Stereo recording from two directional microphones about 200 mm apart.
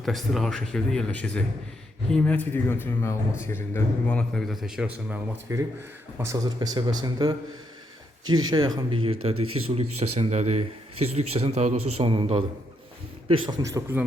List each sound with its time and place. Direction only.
0.0 s a man's voice: centre (ahead or behind); by 7.3 s 20° right (ahead or behind)
8.2 s speech: 90° right
8.4 s speech: 20° right (ahead or behind)
9.3 s speech: 90° right
10.0 s a man's voice: 30° right (ahead or behind); by 14.0 s 15° right (ahead or behind)